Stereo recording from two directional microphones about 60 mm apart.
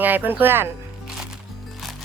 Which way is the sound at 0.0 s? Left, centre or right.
Right.